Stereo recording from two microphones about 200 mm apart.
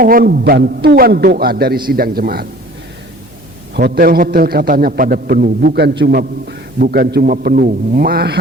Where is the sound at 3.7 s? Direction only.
50° right (ahead or behind).